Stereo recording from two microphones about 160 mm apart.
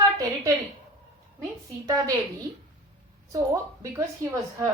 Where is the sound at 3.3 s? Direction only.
20° right (ahead or behind).